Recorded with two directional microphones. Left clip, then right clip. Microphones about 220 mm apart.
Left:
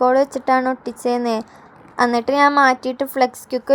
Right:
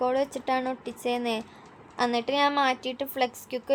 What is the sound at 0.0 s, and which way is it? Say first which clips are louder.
A woman's voice: left 11 dB; 30° left (ahead or behind).